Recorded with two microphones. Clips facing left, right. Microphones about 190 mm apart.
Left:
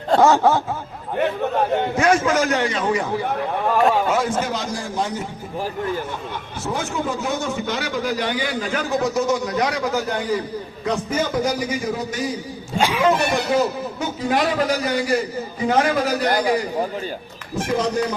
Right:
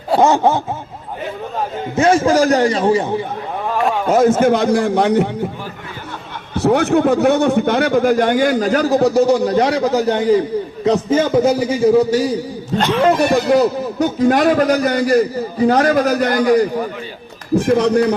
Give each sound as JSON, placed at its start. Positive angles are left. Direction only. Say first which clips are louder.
{"t": 0.2, "sound": "a man's voice", "louder": "right 2 dB", "side_deg": -20}
{"t": 2.0, "sound": "a man's voice", "louder": "right 7 dB", "side_deg": -30}
{"t": 3.8, "sound": "a man's voice", "louder": "right 1 dB", "side_deg": 0}
{"t": 4.1, "sound": "a man's voice", "louder": "right 9 dB", "side_deg": -45}
{"t": 6.6, "sound": "a man's voice", "louder": "right 12 dB", "side_deg": -65}
{"t": 12.7, "sound": "speech", "louder": "right 4 dB", "side_deg": 10}
{"t": 14.0, "sound": "a man's voice", "louder": "right 8 dB", "side_deg": -45}
{"t": 17.7, "sound": "a man's voice", "louder": "right 4 dB", "side_deg": -65}